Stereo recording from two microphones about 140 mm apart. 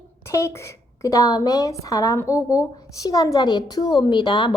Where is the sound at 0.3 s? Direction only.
20° left (ahead or behind).